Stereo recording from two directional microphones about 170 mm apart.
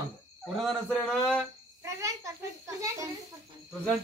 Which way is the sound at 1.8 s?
20° right (ahead or behind).